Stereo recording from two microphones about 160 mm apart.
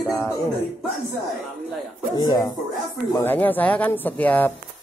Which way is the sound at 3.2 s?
10° left (ahead or behind).